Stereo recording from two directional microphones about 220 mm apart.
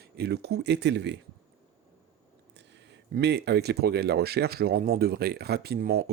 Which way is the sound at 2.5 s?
55° right (ahead or behind).